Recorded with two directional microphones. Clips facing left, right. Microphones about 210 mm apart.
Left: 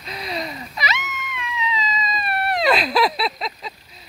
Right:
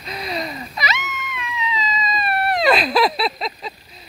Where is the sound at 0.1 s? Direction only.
45° right (ahead or behind); by 3.7 s 25° right (ahead or behind).